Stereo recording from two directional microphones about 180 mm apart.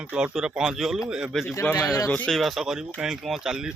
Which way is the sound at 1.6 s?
15° left (ahead or behind).